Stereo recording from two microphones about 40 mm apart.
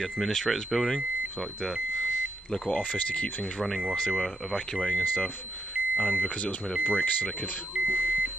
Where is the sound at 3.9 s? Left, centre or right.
Left.